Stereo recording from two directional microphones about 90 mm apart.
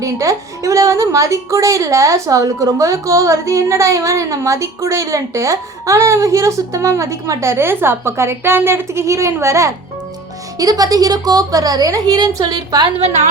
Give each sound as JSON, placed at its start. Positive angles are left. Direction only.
{"t": 0.0, "sound": "a woman's voice", "side_deg": -35}